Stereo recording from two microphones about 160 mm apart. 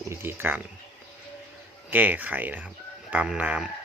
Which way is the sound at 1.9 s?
10° right (ahead or behind).